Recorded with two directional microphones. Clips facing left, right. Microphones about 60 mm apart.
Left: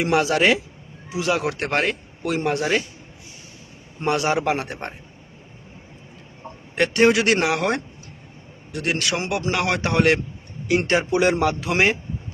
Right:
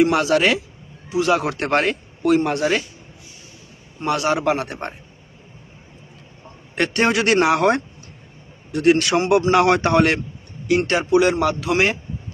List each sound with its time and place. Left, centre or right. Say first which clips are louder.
0.0 s a man's voice: right 2 dB; centre
4.0 s a man's voice: right 1 dB; centre
6.7 s speech: left 2 dB; centre
10.7 s a man's voice: right 2 dB; centre